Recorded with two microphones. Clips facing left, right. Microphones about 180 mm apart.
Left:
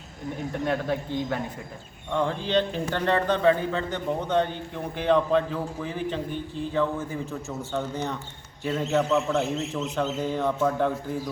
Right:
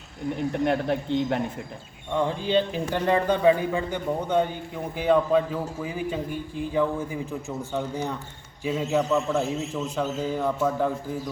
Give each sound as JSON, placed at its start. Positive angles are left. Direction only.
{"t": 0.6, "sound": "speech", "side_deg": -25}
{"t": 2.1, "sound": "a man's voice", "side_deg": -10}
{"t": 10.2, "sound": "a sound", "side_deg": -5}